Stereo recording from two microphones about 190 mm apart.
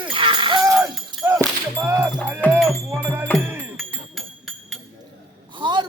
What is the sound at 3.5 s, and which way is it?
Music, 5° right (ahead or behind).